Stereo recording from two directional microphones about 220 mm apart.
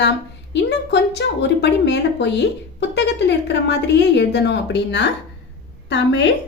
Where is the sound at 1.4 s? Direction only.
50° left (ahead or behind).